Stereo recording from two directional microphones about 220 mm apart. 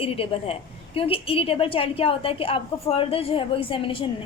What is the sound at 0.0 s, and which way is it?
A woman's voice, 25° left (ahead or behind).